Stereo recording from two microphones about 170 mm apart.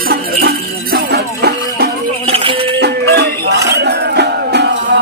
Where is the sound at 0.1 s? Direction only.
70° right (ahead or behind).